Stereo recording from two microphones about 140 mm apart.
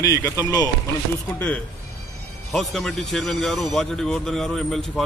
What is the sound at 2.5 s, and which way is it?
A man's voice, centre (ahead or behind).